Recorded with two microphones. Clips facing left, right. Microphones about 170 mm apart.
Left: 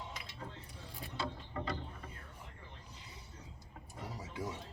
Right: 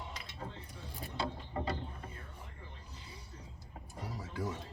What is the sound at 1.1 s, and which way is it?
Mechanisms, 25° right (ahead or behind).